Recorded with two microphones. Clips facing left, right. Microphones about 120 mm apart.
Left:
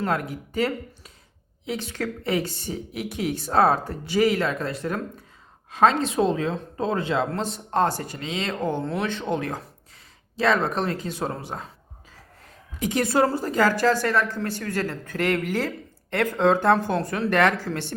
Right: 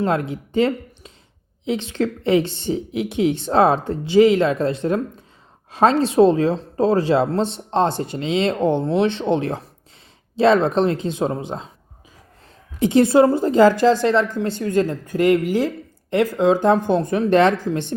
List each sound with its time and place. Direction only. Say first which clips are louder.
0.0 s a woman's voice: right 5 dB; 25° right (ahead or behind)
12.8 s a woman's voice: right 8 dB; 25° right (ahead or behind)